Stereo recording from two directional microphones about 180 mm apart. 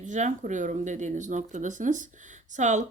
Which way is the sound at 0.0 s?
45° right (ahead or behind).